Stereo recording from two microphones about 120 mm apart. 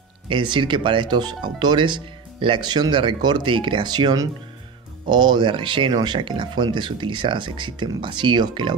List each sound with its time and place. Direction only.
0.3 s speech: 40° right (ahead or behind)